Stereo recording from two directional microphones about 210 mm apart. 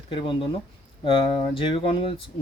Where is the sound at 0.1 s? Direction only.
25° left (ahead or behind).